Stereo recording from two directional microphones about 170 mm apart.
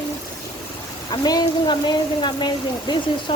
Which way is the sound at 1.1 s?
25° left (ahead or behind).